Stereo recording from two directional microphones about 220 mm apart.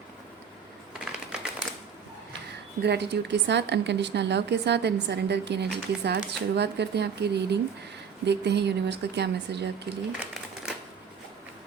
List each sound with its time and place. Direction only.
0.9 s typing: 5° right (ahead or behind)
2.8 s a woman's voice: 50° right (ahead or behind)